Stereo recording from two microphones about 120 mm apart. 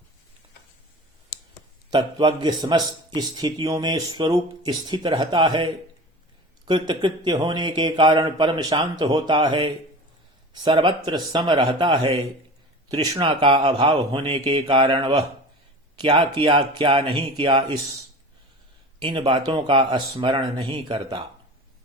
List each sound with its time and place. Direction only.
1.9 s a man's voice: 40° right (ahead or behind)
13.1 s a man's voice: 45° right (ahead or behind)
18.9 s a man's voice: 45° right (ahead or behind)